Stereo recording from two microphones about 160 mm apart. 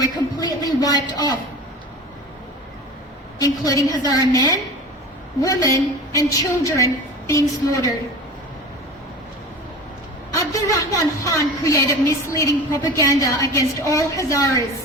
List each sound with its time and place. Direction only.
0.0 s a woman's voice: 25° left (ahead or behind)
3.3 s a woman's voice: 20° left (ahead or behind)
10.3 s a woman's voice: 20° left (ahead or behind)